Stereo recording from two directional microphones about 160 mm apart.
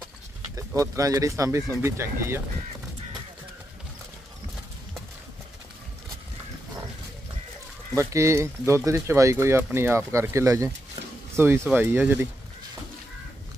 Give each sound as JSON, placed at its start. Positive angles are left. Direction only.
{"t": 0.6, "sound": "speech", "side_deg": -20}
{"t": 7.9, "sound": "speech", "side_deg": -20}